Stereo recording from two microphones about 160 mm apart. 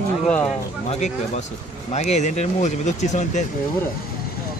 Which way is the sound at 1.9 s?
45° left (ahead or behind).